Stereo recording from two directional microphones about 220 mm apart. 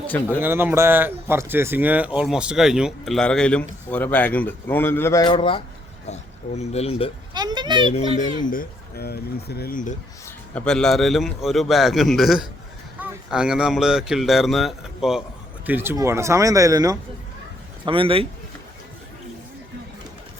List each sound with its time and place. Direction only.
0.3 s speech: 10° right (ahead or behind); by 7.1 s 25° left (ahead or behind)
7.3 s a child's voice: 20° right (ahead or behind)
8.4 s speech: 45° left (ahead or behind)
10.2 s a man's voice: 5° left (ahead or behind); by 18.3 s 25° right (ahead or behind)